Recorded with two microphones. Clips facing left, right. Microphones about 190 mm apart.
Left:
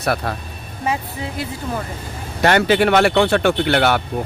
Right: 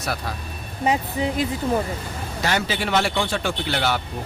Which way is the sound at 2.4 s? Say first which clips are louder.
Left 10 dB; 60° left (ahead or behind).